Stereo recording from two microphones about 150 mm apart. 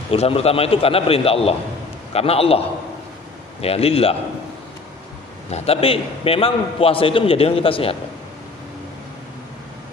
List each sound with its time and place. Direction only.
0.1 s a man's voice: 40° left (ahead or behind)
3.6 s a man's voice: 40° left (ahead or behind)
5.5 s a man's voice: 40° left (ahead or behind)